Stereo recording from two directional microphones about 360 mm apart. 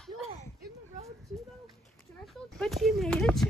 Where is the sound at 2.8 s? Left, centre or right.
Centre.